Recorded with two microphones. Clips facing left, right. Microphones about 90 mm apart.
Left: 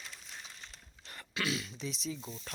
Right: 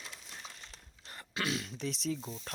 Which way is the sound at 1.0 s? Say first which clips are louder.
Even; 35° right (ahead or behind).